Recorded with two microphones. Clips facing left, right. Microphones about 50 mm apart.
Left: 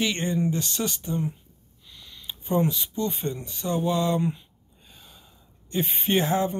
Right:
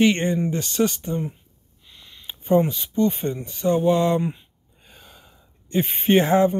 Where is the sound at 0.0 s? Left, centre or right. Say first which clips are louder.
Right 6 dB; right.